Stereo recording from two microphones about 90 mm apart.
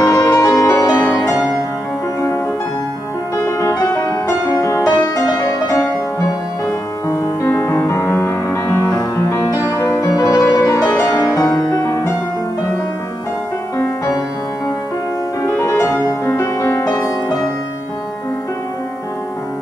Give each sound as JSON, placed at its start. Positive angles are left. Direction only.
{"t": 0.0, "sound": "music", "side_deg": 45}
{"t": 3.3, "sound": "music", "side_deg": 40}
{"t": 7.4, "sound": "music", "side_deg": 25}
{"t": 15.4, "sound": "music", "side_deg": 35}